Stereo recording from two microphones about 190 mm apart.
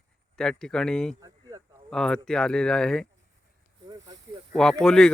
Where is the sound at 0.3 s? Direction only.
5° left (ahead or behind).